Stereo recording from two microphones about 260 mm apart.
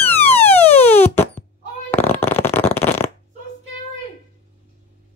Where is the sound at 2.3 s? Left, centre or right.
Centre.